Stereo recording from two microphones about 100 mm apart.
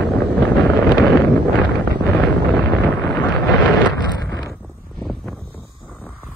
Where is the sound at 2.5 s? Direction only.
5° left (ahead or behind).